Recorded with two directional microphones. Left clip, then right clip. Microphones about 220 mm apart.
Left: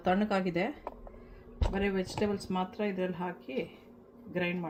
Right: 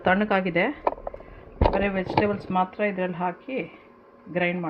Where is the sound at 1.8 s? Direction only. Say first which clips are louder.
Right 9 dB; 25° right (ahead or behind).